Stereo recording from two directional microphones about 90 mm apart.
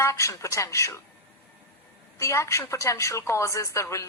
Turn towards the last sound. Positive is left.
turn(degrees=35)  # may be behind; listen again after turning